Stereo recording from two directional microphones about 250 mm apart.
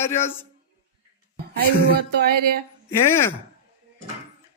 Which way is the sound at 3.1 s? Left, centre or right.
Centre.